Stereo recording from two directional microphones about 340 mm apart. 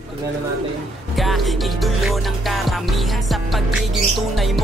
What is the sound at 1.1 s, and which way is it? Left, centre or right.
Music, centre.